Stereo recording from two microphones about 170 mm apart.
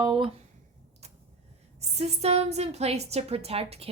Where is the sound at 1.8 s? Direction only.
40° right (ahead or behind).